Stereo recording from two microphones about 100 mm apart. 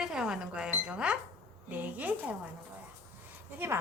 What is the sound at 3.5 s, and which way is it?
Speech, 25° right (ahead or behind).